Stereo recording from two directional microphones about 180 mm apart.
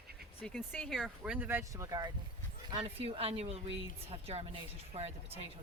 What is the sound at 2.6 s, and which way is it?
Speech, 30° right (ahead or behind).